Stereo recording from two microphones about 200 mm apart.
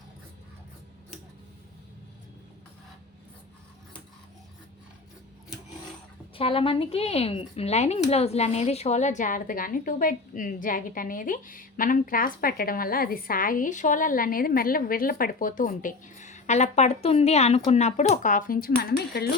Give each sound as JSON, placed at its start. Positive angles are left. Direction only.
{"t": 6.3, "sound": "speech", "side_deg": 25}